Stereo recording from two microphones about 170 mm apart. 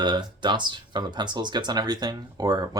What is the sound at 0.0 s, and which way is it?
Speech, 25° right (ahead or behind).